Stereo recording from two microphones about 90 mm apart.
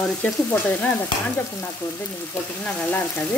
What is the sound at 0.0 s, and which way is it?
Stir, 15° left (ahead or behind).